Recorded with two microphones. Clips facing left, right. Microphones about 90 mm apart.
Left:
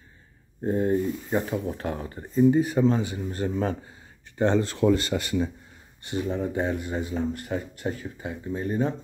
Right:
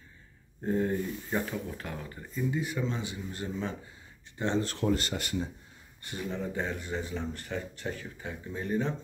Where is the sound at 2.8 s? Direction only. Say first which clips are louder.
Left 11 dB; 50° left (ahead or behind).